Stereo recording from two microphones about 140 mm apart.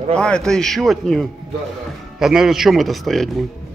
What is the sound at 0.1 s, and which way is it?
Speech, 5° left (ahead or behind).